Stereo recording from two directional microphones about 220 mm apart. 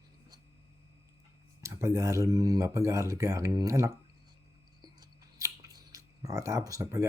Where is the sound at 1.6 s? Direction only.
15° right (ahead or behind).